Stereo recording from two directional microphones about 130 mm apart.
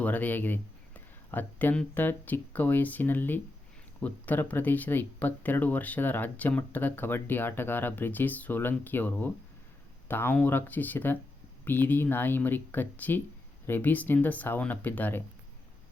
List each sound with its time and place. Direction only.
0.0 s speech: 15° left (ahead or behind)